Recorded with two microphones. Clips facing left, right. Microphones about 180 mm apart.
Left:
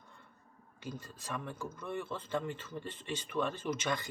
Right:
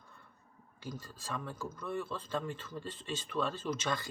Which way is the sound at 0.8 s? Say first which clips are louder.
Even; 20° left (ahead or behind).